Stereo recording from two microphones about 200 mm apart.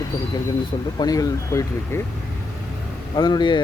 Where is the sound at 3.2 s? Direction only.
20° left (ahead or behind).